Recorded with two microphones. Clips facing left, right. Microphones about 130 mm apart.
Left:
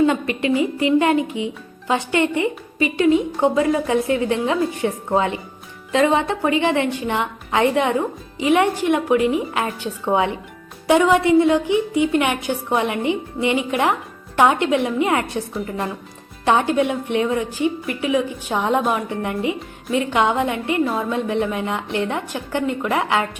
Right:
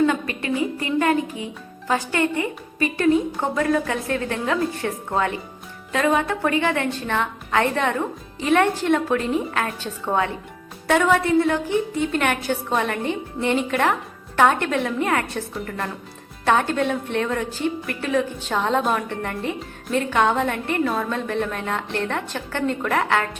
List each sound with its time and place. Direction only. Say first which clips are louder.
0.0 s a woman's voice: left 3 dB; 20° left (ahead or behind)
16.5 s a woman's voice: left 2 dB; 15° left (ahead or behind)